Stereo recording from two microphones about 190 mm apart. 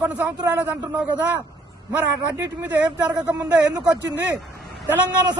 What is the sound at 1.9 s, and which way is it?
A man's voice, 10° right (ahead or behind).